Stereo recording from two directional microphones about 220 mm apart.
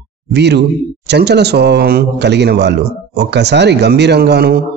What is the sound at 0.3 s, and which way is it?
Speech, 50° right (ahead or behind).